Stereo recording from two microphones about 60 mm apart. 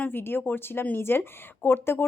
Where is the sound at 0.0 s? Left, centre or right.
Left.